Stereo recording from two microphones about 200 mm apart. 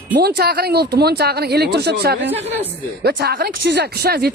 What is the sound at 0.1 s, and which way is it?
Speech, 55° right (ahead or behind).